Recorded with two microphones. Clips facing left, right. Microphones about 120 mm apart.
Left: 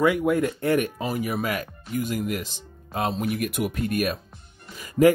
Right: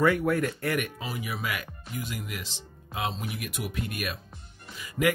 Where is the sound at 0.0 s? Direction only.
15° left (ahead or behind); by 1.0 s 30° left (ahead or behind).